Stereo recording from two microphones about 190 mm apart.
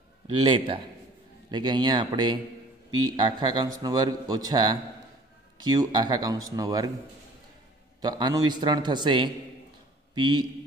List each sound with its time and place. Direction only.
0.3 s a man's voice: 25° right (ahead or behind)
8.0 s a man's voice: 20° right (ahead or behind)